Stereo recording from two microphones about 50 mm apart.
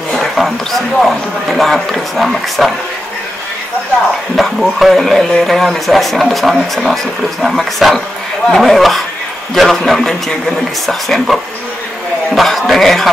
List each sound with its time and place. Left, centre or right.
0.1 s speech: centre
4.4 s speech: centre